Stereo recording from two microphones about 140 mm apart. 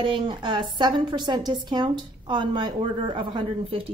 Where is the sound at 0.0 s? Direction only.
35° right (ahead or behind).